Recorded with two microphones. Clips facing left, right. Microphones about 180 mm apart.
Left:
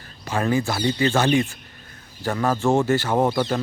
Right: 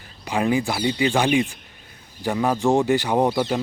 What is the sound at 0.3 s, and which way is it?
Speech, 15° right (ahead or behind).